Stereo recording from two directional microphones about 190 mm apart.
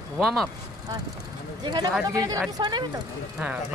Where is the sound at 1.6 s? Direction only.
20° right (ahead or behind).